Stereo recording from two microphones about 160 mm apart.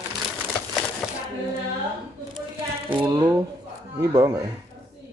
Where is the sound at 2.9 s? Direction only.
25° right (ahead or behind).